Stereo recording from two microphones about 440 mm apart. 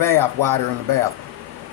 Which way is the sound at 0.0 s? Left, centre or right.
Right.